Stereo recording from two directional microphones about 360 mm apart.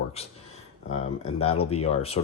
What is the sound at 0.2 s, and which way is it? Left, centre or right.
Speech, centre.